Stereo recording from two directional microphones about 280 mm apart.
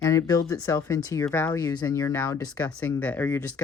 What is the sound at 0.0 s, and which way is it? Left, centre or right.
Speech, centre.